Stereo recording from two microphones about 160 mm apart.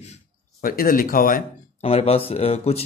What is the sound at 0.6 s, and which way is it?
Speech, 60° left (ahead or behind).